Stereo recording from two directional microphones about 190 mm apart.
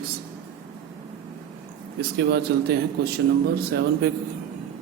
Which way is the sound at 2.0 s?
60° right (ahead or behind).